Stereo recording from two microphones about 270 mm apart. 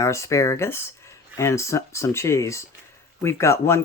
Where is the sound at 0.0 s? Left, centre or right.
Centre.